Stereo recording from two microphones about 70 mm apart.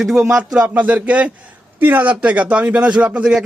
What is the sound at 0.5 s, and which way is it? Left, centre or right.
A man's voice, centre.